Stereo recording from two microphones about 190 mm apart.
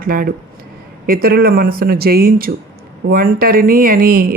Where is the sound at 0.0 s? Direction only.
50° right (ahead or behind).